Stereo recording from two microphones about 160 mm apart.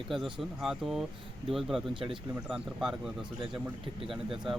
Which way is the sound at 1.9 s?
30° right (ahead or behind).